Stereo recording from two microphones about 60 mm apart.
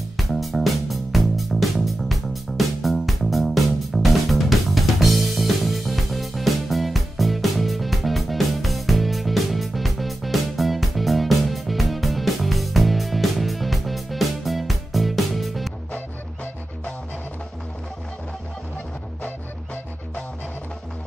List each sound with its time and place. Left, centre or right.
0.2 s music: centre
19.2 s music: left